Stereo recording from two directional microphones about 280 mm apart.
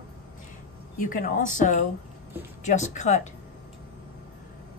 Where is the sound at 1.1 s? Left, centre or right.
Left.